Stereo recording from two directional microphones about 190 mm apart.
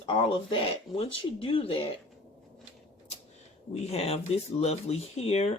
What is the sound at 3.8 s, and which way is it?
Speech, 35° left (ahead or behind).